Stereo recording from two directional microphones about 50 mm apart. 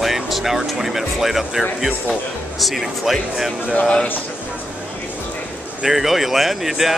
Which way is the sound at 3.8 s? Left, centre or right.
Left.